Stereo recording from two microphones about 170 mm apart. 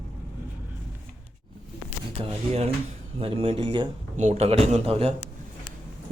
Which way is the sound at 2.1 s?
35° right (ahead or behind).